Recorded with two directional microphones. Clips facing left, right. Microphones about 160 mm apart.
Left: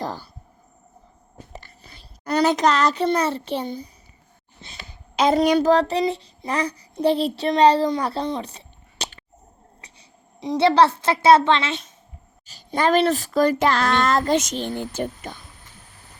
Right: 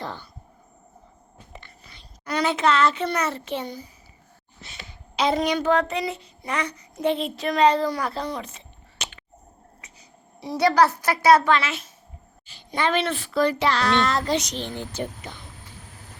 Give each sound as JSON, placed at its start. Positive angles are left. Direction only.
{"t": 0.0, "sound": "a sound", "side_deg": 40}
{"t": 1.5, "sound": "a sound", "side_deg": 40}
{"t": 2.2, "sound": "speech", "side_deg": 40}
{"t": 5.1, "sound": "a child's voice", "side_deg": 45}
{"t": 10.4, "sound": "a child's voice", "side_deg": 20}
{"t": 12.5, "sound": "speech", "side_deg": 40}